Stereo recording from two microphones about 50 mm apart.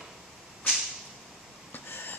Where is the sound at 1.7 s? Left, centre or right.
Left.